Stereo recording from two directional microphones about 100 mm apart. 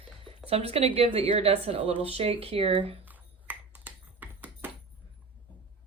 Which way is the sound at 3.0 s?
15° right (ahead or behind).